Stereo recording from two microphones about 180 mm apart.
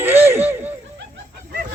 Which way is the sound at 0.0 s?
10° right (ahead or behind).